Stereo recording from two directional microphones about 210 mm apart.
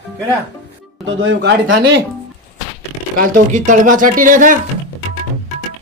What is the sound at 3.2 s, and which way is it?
Speech, 40° right (ahead or behind).